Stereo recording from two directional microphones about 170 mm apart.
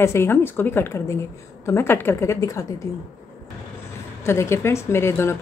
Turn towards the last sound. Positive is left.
turn(degrees=15)  # may be behind; listen again after turning